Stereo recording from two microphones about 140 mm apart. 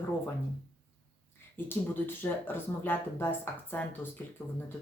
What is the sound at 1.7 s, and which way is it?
Speech, 15° left (ahead or behind).